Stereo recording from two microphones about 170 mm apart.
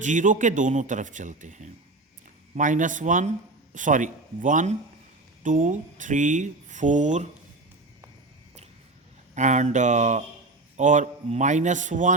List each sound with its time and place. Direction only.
0.0 s speech: 45° right (ahead or behind)
9.3 s speech: 45° right (ahead or behind)